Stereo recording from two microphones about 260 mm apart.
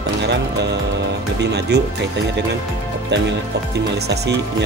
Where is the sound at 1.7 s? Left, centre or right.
Right.